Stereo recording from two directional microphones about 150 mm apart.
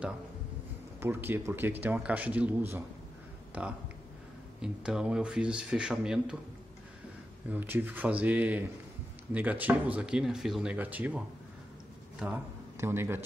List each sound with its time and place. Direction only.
1.0 s speech: 15° right (ahead or behind)
7.5 s speech: 15° right (ahead or behind)
12.7 s speech: 15° right (ahead or behind)